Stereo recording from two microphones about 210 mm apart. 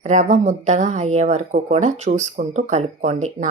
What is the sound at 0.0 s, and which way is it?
Speech, 35° right (ahead or behind).